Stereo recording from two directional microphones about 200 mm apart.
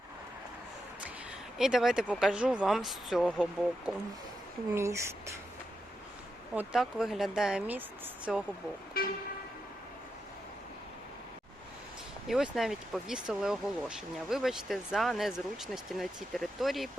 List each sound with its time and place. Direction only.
1.5 s speech: centre (ahead or behind)
4.7 s speech: 15° right (ahead or behind)
6.5 s speech: 5° right (ahead or behind)
8.9 s speech: 45° left (ahead or behind)
12.3 s speech: centre (ahead or behind)